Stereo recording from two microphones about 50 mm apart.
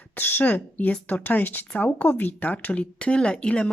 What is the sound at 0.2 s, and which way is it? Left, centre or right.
Speech, left.